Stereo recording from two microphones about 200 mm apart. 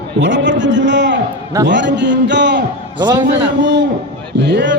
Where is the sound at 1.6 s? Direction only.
60° right (ahead or behind).